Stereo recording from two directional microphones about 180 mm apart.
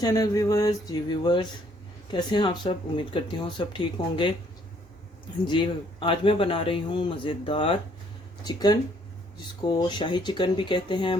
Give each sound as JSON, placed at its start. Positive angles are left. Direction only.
{"t": 0.0, "sound": "speech", "side_deg": 20}
{"t": 5.5, "sound": "speech", "side_deg": 25}